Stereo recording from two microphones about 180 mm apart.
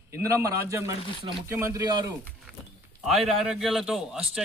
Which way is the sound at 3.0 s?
Centre (ahead or behind).